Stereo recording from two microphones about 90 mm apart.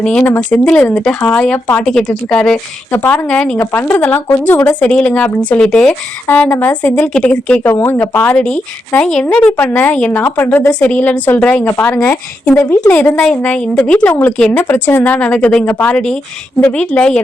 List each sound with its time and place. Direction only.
0.0 s a woman's voice: 15° left (ahead or behind)
1.8 s a woman's voice: 10° left (ahead or behind)
3.6 s a woman's voice: 25° left (ahead or behind)
11.7 s a woman's voice: 30° left (ahead or behind); by 17.2 s 15° left (ahead or behind)